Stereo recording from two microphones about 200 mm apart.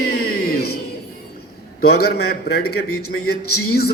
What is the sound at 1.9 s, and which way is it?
Speech, 50° left (ahead or behind).